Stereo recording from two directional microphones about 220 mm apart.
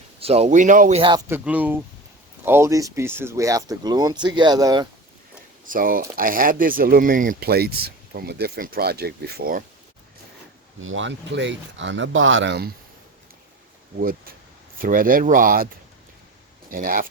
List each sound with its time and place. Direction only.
0.2 s speech: 30° right (ahead or behind)
1.3 s speech: 5° right (ahead or behind)
5.6 s speech: 40° right (ahead or behind)
10.8 s speech: 60° right (ahead or behind)
14.0 s speech: 40° right (ahead or behind)